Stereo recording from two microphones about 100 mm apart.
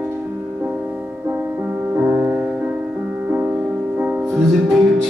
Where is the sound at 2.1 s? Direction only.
20° right (ahead or behind).